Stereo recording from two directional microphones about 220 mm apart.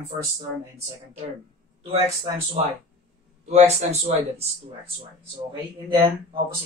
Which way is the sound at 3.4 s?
30° right (ahead or behind).